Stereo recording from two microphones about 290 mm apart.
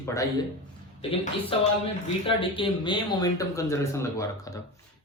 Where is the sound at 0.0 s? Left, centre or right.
Centre.